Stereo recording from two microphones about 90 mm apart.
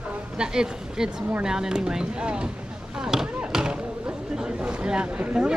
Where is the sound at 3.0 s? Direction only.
5° right (ahead or behind).